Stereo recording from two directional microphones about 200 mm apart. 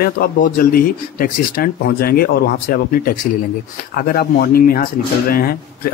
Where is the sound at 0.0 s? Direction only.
45° left (ahead or behind).